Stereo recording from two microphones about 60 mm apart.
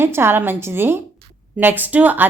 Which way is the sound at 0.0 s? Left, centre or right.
Right.